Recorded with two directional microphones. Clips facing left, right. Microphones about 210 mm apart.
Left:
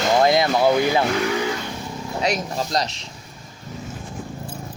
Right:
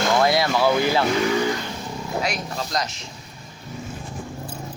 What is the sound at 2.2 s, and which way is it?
Speech, 40° left (ahead or behind).